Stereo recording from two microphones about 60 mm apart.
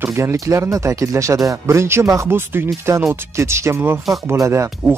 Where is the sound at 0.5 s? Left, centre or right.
Right.